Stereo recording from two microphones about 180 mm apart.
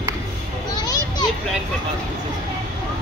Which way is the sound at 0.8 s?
20° left (ahead or behind).